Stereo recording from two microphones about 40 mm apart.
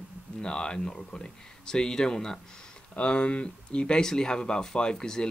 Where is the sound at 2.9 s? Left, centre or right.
Left.